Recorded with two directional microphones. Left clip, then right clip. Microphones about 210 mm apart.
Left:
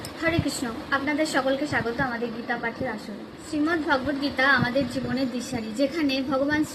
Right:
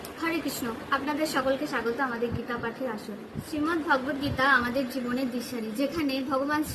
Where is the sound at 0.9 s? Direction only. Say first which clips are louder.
Left 3 dB; 10° right (ahead or behind).